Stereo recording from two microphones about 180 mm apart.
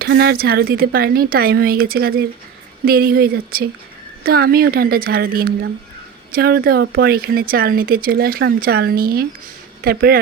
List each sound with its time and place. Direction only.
0.0 s speech: 65° right (ahead or behind)